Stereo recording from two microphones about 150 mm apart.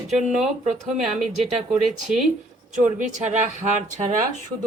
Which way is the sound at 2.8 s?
55° right (ahead or behind).